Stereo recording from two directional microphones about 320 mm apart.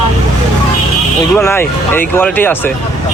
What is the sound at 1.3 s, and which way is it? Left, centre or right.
Speech, centre.